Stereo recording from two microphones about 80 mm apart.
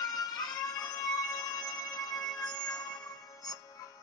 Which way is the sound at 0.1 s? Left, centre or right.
Left.